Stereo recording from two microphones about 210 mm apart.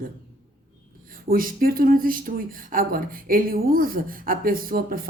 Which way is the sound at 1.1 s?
40° right (ahead or behind).